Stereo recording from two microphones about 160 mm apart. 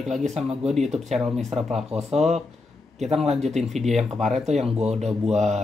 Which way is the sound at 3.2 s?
45° right (ahead or behind).